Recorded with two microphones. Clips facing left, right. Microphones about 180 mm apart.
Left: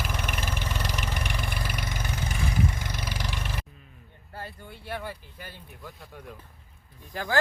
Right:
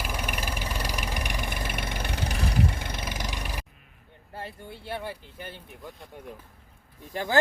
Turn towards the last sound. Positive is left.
turn(degrees=-25)  # may be behind; listen again after turning